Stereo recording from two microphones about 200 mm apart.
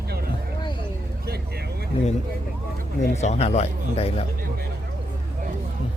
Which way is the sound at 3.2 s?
35° left (ahead or behind).